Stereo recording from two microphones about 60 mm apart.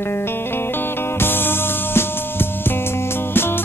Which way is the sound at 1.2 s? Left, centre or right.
Left.